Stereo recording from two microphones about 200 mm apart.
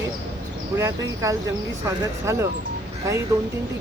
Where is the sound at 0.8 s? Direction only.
15° right (ahead or behind).